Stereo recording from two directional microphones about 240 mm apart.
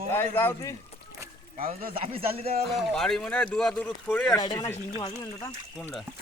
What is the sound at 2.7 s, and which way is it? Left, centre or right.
A man's voice, centre.